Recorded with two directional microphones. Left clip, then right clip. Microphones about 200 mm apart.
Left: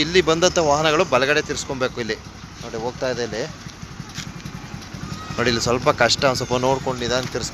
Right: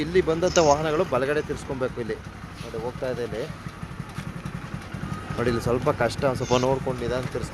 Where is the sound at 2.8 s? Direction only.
30° left (ahead or behind).